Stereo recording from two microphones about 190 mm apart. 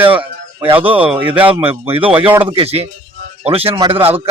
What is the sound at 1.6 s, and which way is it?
Speech, 30° right (ahead or behind).